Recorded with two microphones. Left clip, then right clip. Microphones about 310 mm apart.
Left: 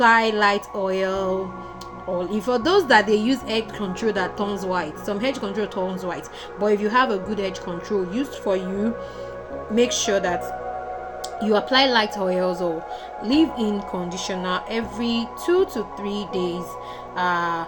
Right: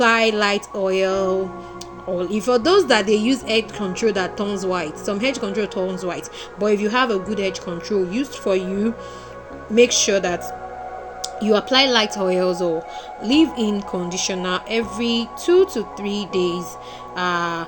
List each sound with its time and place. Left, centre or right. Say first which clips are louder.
0.0 s a woman's voice: even; centre
11.4 s a woman's voice: right 2 dB; centre